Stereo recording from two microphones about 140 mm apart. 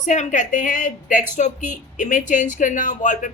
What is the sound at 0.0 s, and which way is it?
Speech, 60° left (ahead or behind).